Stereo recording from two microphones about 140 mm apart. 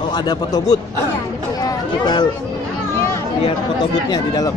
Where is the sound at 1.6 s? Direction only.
30° left (ahead or behind).